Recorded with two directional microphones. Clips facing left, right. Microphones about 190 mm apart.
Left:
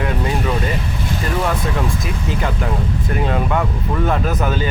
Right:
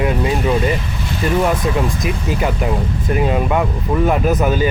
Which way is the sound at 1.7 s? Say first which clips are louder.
Right 3 dB; 15° right (ahead or behind).